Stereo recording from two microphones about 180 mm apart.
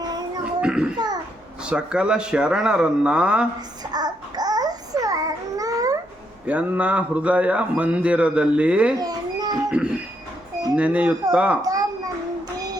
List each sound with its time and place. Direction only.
0.6 s speech: 5° right (ahead or behind)
0.9 s babbling: 20° right (ahead or behind)
1.7 s speech: 5° right (ahead or behind)
3.9 s babbling: 20° right (ahead or behind)
6.5 s speech: 5° right (ahead or behind)
9.0 s a sound: 20° right (ahead or behind)
10.8 s speech: 5° right (ahead or behind)